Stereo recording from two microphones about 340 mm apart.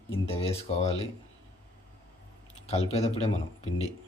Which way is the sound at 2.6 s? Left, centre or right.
Centre.